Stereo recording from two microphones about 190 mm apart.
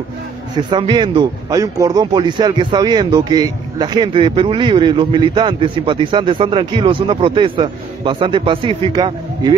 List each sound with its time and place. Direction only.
0.6 s speech: 25° right (ahead or behind)